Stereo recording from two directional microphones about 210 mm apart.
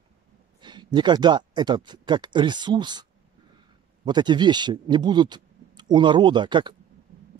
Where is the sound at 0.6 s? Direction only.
20° right (ahead or behind).